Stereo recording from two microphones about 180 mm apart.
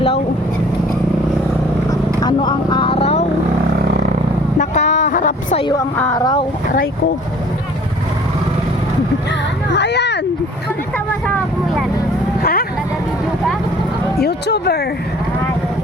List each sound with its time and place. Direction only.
1.9 s vehicle: 25° left (ahead or behind)
4.5 s a sound: 40° left (ahead or behind)
5.5 s a sound: 25° left (ahead or behind)
6.1 s speech: 20° left (ahead or behind)
9.7 s speech: 70° left (ahead or behind)
12.4 s vehicle: 55° left (ahead or behind)
14.2 s speech: 65° left (ahead or behind)